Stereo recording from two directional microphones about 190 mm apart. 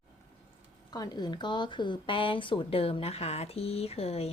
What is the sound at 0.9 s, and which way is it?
Speech, 20° left (ahead or behind).